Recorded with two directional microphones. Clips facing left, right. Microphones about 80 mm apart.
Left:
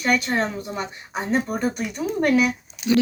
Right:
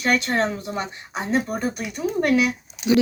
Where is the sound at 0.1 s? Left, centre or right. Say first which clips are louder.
Even; centre.